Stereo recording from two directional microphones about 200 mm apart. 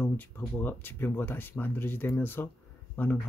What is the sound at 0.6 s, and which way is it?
Speech, 10° left (ahead or behind).